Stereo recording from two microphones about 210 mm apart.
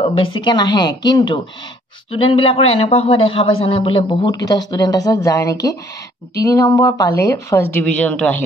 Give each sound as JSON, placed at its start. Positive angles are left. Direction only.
{"t": 0.4, "sound": "a woman's voice", "side_deg": 20}